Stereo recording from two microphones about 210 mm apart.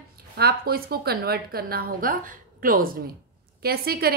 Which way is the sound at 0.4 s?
45° right (ahead or behind).